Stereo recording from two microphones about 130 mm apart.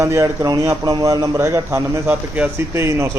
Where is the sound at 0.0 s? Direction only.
20° right (ahead or behind).